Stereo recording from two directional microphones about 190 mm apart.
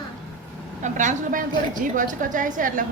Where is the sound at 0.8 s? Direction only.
40° right (ahead or behind).